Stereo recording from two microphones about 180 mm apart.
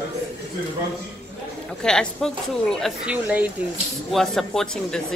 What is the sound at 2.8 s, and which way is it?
Speech, 10° right (ahead or behind).